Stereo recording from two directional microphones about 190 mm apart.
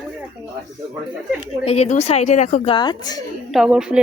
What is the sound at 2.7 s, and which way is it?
Speech, 20° left (ahead or behind).